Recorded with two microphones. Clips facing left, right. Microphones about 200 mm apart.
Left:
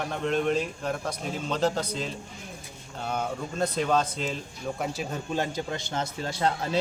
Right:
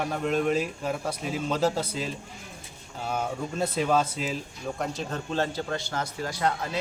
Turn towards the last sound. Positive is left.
turn(degrees=25)  # may be behind; listen again after turning